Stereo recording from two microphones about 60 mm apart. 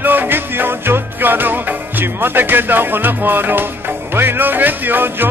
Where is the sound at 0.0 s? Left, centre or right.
Right.